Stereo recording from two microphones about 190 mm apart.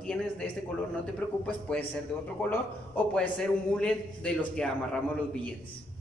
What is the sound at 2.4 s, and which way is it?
A man's voice, 10° left (ahead or behind).